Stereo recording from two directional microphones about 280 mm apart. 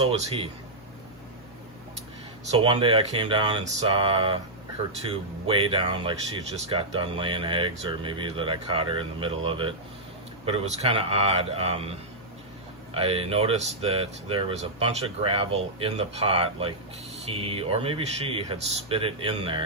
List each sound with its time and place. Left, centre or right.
0.0 s speech: centre
2.5 s speech: centre